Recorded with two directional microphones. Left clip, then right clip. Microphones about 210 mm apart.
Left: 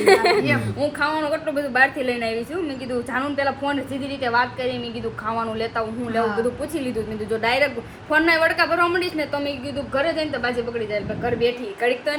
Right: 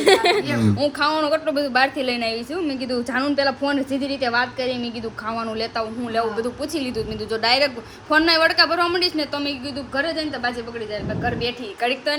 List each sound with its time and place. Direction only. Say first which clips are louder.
0.0 s a woman's voice: even; 50° right (ahead or behind)
0.8 s a woman's voice: right 2 dB; 25° right (ahead or behind)
2.6 s a woman's voice: right 2 dB; 50° right (ahead or behind)
7.3 s a woman's voice: right 1 dB; 20° right (ahead or behind)